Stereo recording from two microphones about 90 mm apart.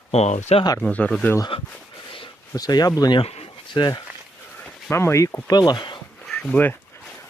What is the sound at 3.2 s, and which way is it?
Speech, 75° left (ahead or behind).